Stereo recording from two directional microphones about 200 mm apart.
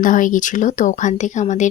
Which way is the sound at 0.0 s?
40° left (ahead or behind).